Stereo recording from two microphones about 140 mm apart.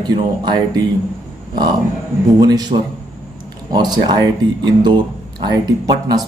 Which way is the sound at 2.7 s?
50° right (ahead or behind).